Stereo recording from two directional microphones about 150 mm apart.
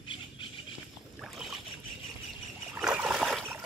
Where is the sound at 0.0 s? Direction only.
35° left (ahead or behind).